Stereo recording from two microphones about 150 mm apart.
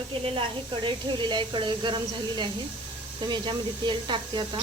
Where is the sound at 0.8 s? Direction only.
30° right (ahead or behind).